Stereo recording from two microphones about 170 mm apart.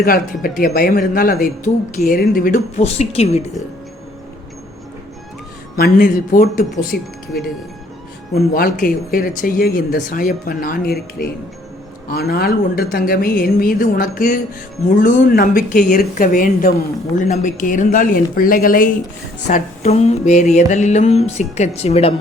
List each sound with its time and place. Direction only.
0.0 s speech: 60° left (ahead or behind); by 3.4 s 40° left (ahead or behind)
5.7 s speech: 60° left (ahead or behind)
6.9 s speech: 70° left (ahead or behind)
8.5 s speech: 55° left (ahead or behind)
14.8 s mantra: 50° left (ahead or behind)
19.5 s mantra: 45° left (ahead or behind)